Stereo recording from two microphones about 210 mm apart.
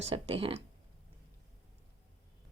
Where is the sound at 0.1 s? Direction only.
25° right (ahead or behind).